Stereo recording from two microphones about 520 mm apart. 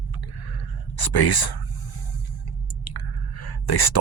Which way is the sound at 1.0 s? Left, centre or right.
Left.